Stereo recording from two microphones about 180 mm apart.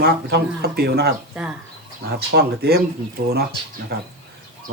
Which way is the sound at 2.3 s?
65° right (ahead or behind).